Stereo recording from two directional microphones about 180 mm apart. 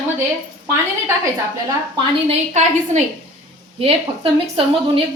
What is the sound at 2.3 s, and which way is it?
A woman's voice, 40° right (ahead or behind).